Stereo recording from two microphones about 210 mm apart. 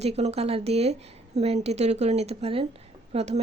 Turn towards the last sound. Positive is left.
turn(degrees=-30)  # may be behind; listen again after turning